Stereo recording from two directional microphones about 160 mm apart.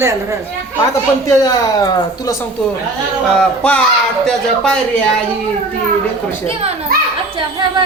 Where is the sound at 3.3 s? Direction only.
5° left (ahead or behind).